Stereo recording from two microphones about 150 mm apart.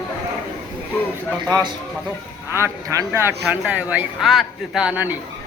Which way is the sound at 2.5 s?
15° right (ahead or behind).